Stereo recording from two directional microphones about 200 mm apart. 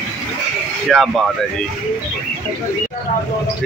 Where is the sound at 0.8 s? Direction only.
Centre (ahead or behind).